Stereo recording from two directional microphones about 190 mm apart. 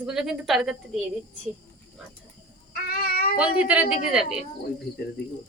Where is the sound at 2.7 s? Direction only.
55° left (ahead or behind).